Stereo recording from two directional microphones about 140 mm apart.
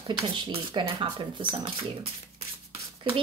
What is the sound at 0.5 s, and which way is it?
Speech, 35° right (ahead or behind).